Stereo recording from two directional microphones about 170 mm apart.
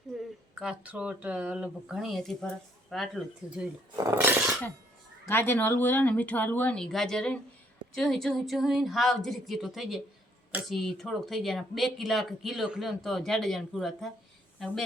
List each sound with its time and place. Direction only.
0.2 s speech: 5° right (ahead or behind)
3.9 s speech: 15° right (ahead or behind)
5.3 s speech: 10° left (ahead or behind)